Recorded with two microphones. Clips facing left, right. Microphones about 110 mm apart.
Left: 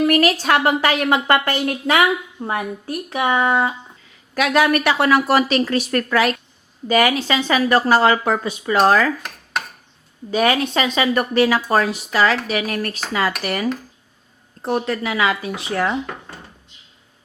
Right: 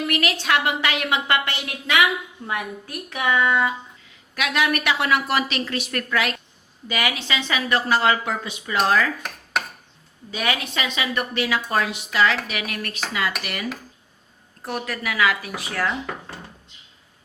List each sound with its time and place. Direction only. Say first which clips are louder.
0.0 s a woman's voice: left 8 dB; 40° left (ahead or behind)
9.2 s cutlery: even; centre (ahead or behind)
10.3 s a woman's voice: left 8 dB; 40° left (ahead or behind)
14.6 s speech: left 7 dB; 25° left (ahead or behind)